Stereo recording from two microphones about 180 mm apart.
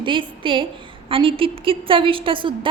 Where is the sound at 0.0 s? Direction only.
30° right (ahead or behind).